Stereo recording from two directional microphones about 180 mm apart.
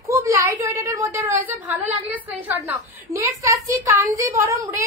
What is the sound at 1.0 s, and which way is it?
A woman's voice, 15° right (ahead or behind).